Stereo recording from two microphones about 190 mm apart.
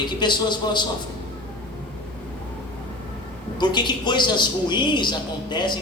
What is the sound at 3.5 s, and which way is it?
A man's voice, 25° left (ahead or behind).